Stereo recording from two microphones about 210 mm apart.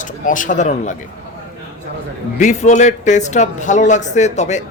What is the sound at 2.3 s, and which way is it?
Speech, 35° left (ahead or behind).